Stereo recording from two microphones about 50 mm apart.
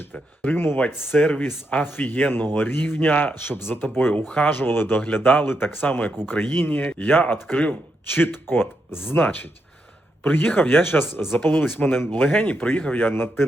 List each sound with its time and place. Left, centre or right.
0.1 s speech: left
0.5 s speech: left
3.0 s speech: left
3.4 s speech: left
3.8 s speech: left
4.4 s speech: left
5.0 s speech: left
6.0 s speech: left
6.5 s speech: left
6.7 s speech: left
8.0 s speech: left
12.3 s speech: left
13.1 s speech: left